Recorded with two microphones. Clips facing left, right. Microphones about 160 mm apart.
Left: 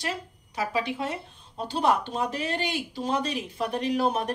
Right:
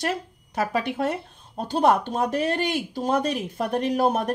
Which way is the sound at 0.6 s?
50° right (ahead or behind).